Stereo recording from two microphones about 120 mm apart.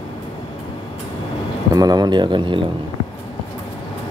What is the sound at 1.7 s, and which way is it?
Speech, 35° right (ahead or behind).